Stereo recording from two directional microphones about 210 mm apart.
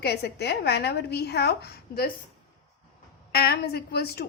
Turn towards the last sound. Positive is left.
turn(degrees=50)  # may be behind; listen again after turning